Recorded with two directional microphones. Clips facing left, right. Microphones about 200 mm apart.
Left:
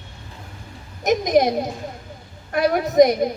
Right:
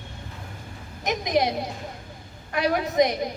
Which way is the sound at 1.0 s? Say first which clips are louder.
Left 6 dB; 45° left (ahead or behind).